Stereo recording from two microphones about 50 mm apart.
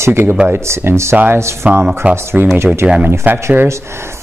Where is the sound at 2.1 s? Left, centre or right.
Right.